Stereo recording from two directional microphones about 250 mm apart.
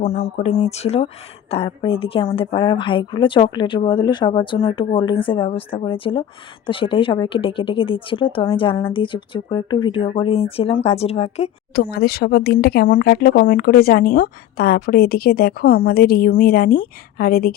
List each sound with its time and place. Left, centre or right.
0.0 s speech: left
11.7 s speech: left